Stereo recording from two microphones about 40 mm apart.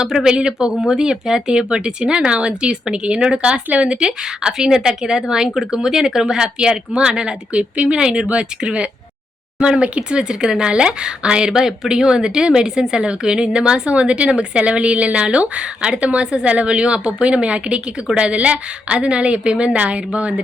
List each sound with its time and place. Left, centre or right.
0.9 s speech: centre
13.9 s speech: right